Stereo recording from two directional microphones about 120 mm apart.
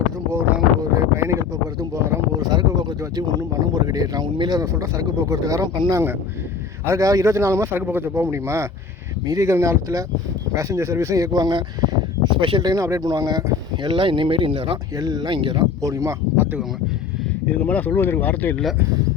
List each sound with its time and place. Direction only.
0.3 s a sound: 15° right (ahead or behind)
0.9 s a sound: 25° right (ahead or behind)
1.8 s speech: 30° right (ahead or behind)
12.6 s speech: 25° right (ahead or behind); by 14.8 s 45° right (ahead or behind)
14.9 s speech: 30° right (ahead or behind)
15.8 s speech: 25° right (ahead or behind)
16.4 s speech: 15° right (ahead or behind)
17.6 s speech: 15° left (ahead or behind)